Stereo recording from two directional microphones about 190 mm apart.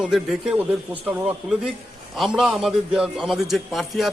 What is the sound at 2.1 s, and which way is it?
A man's voice, centre (ahead or behind).